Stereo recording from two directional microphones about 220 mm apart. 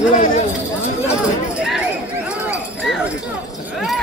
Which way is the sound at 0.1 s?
35° left (ahead or behind).